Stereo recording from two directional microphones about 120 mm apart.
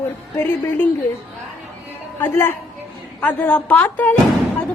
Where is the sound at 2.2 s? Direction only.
20° left (ahead or behind).